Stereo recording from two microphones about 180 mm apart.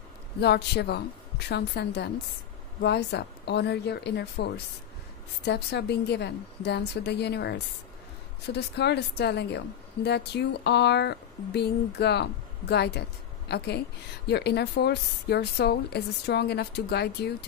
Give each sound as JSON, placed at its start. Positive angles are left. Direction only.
{"t": 0.4, "sound": "a woman's voice", "side_deg": 70}